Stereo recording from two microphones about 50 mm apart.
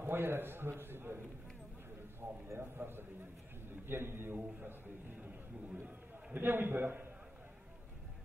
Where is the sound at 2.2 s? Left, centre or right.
Right.